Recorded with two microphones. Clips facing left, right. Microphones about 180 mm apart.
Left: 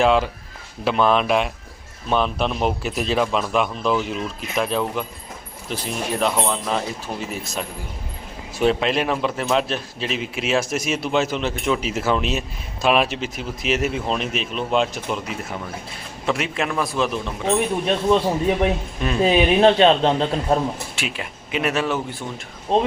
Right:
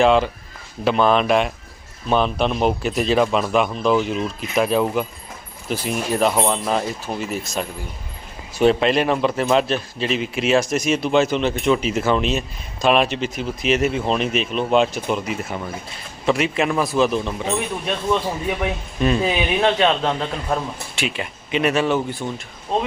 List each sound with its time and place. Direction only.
0.0 s speech: 5° left (ahead or behind)
17.8 s a man's voice: 30° left (ahead or behind)
20.9 s speech: centre (ahead or behind)
22.7 s a man's voice: 30° left (ahead or behind)